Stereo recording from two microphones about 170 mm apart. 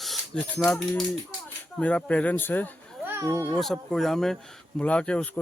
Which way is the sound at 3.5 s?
Centre (ahead or behind).